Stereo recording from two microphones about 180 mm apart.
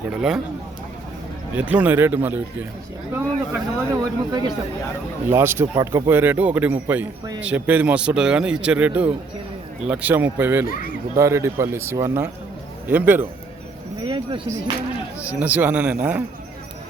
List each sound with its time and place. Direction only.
0.1 s a man's voice: 5° right (ahead or behind)
1.5 s a man's voice: 10° right (ahead or behind)
10.7 s speech: 50° left (ahead or behind)
11.2 s a man's voice: 15° right (ahead or behind)
15.3 s a man's voice: 10° right (ahead or behind)